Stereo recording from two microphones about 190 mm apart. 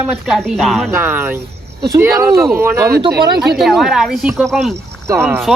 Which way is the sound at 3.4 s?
Centre (ahead or behind).